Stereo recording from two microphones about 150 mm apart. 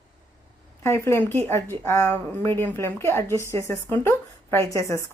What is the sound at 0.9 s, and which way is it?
A woman's voice, 15° left (ahead or behind).